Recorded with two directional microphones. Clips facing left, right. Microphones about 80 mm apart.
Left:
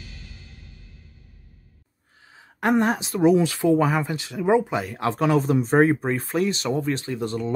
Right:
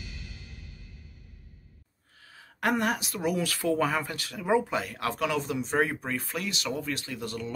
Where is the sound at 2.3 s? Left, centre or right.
Left.